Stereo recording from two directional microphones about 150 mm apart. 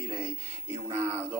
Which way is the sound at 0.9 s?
15° right (ahead or behind).